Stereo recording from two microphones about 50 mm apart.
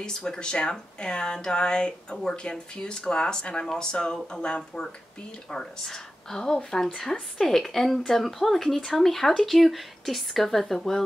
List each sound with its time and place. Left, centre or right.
0.0 s speech: centre